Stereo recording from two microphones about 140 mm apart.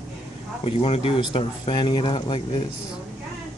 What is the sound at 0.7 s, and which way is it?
Speech, 45° left (ahead or behind).